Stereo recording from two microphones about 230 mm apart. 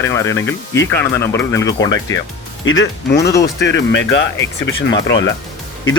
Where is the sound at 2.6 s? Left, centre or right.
Left.